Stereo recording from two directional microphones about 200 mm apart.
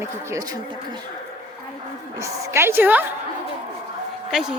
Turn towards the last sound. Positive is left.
turn(degrees=0)  # may be behind; listen again after turning